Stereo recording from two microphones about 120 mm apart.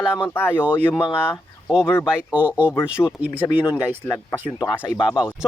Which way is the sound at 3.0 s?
20° left (ahead or behind).